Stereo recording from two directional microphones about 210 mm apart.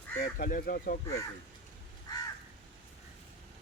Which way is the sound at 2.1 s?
20° left (ahead or behind).